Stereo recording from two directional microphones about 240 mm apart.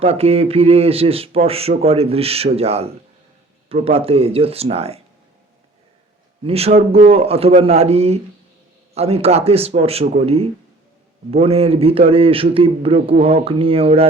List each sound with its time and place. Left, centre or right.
0.0 s speech: right
6.4 s speech: right